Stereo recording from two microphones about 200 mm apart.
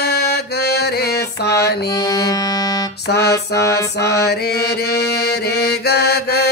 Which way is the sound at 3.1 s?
55° left (ahead or behind).